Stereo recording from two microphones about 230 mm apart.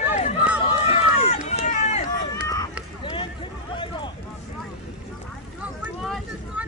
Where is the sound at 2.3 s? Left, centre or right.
Centre.